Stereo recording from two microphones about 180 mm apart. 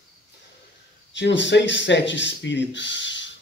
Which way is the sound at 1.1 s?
90° left.